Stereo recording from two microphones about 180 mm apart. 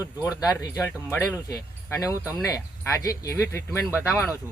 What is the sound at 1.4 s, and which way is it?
Speech, 20° left (ahead or behind).